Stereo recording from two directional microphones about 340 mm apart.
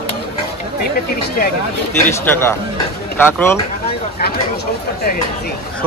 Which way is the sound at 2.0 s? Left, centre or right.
Centre.